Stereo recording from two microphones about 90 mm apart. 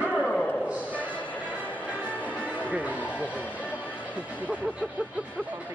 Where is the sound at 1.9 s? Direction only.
15° right (ahead or behind).